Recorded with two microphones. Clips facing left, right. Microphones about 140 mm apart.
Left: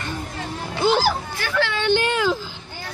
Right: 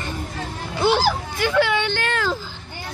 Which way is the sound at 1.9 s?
15° left (ahead or behind).